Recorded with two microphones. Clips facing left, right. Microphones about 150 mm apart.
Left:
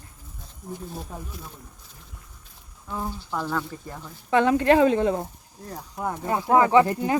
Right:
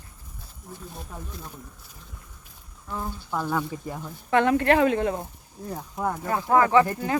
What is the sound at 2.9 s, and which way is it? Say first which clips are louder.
Speech: left 1 dB; 10° left (ahead or behind).